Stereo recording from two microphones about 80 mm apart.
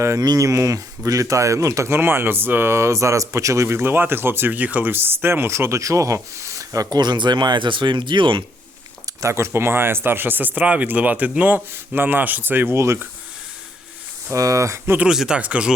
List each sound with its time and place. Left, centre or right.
0.0 s speech: right
2.0 s speech: right
7.0 s speech: right
9.2 s speech: right
14.3 s speech: right
14.9 s speech: centre